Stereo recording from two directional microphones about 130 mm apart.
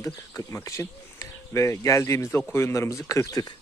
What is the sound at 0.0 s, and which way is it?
Speech, 25° left (ahead or behind).